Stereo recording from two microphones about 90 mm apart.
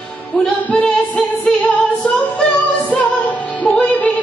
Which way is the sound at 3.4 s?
15° left (ahead or behind).